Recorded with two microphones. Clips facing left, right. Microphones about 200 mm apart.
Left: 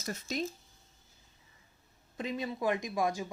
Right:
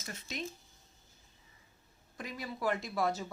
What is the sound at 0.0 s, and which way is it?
Speech, 40° left (ahead or behind).